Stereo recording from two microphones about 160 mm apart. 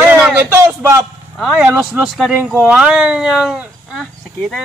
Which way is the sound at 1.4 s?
5° right (ahead or behind).